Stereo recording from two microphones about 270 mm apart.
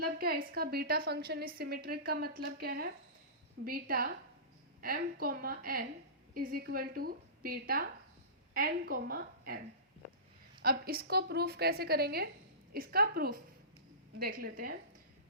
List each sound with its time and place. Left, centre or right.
0.0 s a woman's voice: right
10.6 s a woman's voice: right